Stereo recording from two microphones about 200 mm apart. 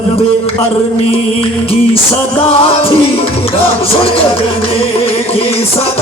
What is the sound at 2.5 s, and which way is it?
Music, 30° left (ahead or behind).